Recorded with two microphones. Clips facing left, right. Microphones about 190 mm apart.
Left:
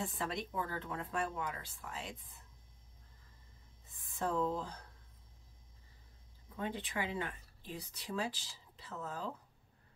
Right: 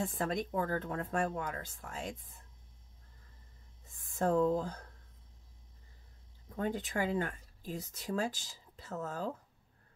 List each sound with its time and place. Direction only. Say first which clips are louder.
0.0 s speech: right 5 dB; 45° right (ahead or behind)
3.9 s speech: right 6 dB; 45° right (ahead or behind)
6.5 s speech: right 5 dB; 45° right (ahead or behind)